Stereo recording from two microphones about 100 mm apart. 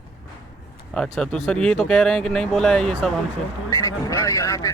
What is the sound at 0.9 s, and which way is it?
Speech, 5° left (ahead or behind).